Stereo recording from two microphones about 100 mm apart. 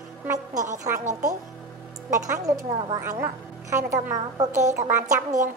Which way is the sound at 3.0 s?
25° right (ahead or behind).